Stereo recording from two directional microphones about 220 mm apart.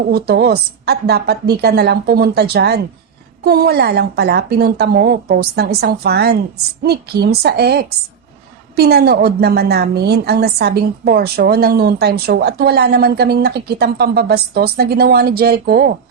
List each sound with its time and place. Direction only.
0.1 s a woman's voice: 45° right (ahead or behind)